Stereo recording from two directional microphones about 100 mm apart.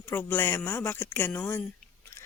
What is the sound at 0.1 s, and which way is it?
Speech, 20° left (ahead or behind).